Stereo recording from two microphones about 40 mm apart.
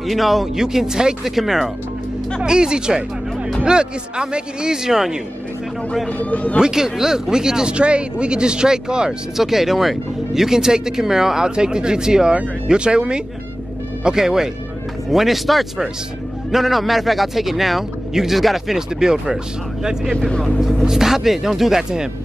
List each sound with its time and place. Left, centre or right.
0.0 s a man's voice: centre
0.6 s speech: centre
2.4 s speech: right
6.3 s speech: left
6.6 s speech: centre
7.7 s a man's voice: right; by 18.8 s centre
18.8 s speech: centre
20.1 s speech: centre
20.8 s speech: centre